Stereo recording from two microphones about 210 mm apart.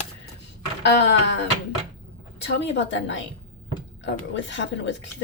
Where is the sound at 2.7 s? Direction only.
60° left (ahead or behind).